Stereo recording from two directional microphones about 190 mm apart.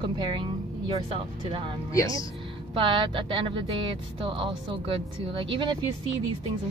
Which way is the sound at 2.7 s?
25° right (ahead or behind).